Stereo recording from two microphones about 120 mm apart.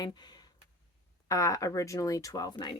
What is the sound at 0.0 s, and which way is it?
Speech, 35° left (ahead or behind).